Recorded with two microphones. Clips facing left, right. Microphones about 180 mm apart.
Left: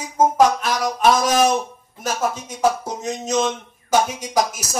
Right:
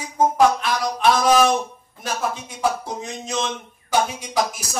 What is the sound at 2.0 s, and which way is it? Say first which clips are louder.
A man's voice: left 3 dB; 40° left (ahead or behind).